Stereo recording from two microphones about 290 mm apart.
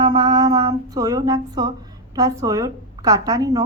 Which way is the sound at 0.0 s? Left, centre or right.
Centre.